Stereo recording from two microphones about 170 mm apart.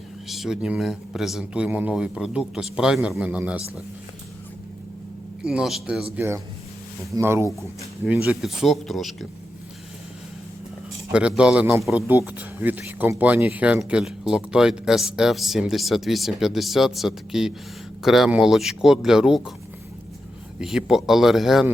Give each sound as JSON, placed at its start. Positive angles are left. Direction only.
{"t": 0.3, "sound": "speech", "side_deg": 0}
{"t": 5.4, "sound": "a man's voice", "side_deg": -5}
{"t": 11.1, "sound": "a man's voice", "side_deg": -5}
{"t": 20.6, "sound": "speech", "side_deg": -5}